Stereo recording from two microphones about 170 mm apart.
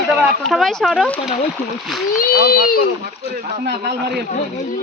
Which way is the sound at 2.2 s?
60° left (ahead or behind).